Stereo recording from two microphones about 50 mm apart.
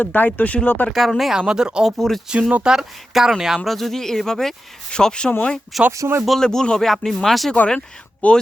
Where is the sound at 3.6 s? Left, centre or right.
Centre.